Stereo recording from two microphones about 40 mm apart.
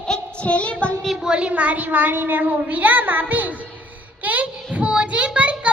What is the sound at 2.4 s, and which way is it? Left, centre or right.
A child's voice, right.